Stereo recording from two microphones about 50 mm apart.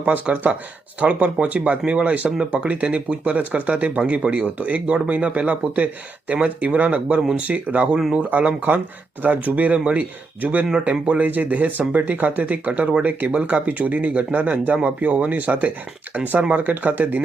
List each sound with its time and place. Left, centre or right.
0.0 s speech: right